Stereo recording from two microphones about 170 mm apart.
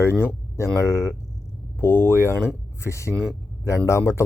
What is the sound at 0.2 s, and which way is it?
Speech, 15° left (ahead or behind).